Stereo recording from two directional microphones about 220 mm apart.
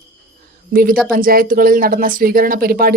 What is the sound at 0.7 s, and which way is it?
A woman's voice, 40° right (ahead or behind).